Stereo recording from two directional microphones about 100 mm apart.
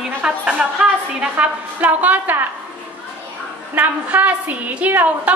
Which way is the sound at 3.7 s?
15° right (ahead or behind).